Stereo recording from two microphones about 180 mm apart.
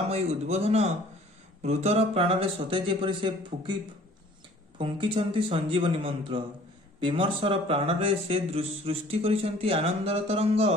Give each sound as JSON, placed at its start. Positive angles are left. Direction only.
{"t": 0.1, "sound": "speech", "side_deg": -35}
{"t": 4.7, "sound": "speech", "side_deg": -30}